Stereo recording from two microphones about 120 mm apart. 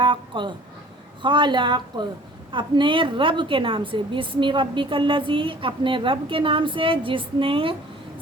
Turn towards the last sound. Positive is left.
turn(degrees=-50)  # may be behind; listen again after turning